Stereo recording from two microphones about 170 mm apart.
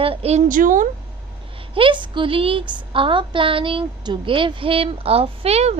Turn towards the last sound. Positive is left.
turn(degrees=-40)  # may be behind; listen again after turning